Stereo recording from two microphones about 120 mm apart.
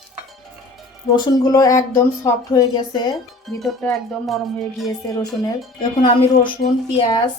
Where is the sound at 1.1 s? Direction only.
35° left (ahead or behind).